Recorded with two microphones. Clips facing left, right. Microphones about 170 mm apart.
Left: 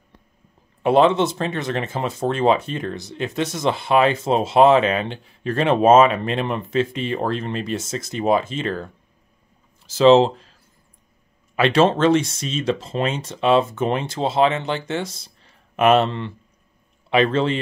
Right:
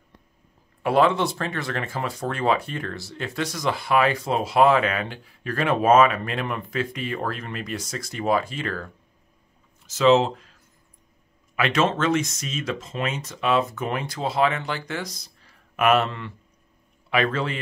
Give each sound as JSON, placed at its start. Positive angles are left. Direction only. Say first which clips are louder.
{"t": 0.8, "sound": "speech", "louder": "left 4 dB", "side_deg": 25}